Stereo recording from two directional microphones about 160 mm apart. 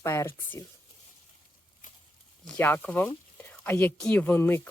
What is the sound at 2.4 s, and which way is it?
Speech, 10° left (ahead or behind).